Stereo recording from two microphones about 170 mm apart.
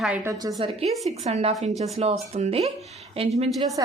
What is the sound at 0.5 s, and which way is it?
Speech, 35° right (ahead or behind).